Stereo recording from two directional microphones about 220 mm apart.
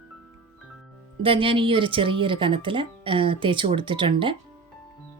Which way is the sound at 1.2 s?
25° right (ahead or behind).